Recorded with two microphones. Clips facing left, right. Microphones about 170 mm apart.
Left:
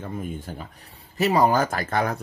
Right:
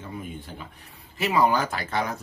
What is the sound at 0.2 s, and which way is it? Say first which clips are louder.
Speech: left 4 dB; 45° left (ahead or behind).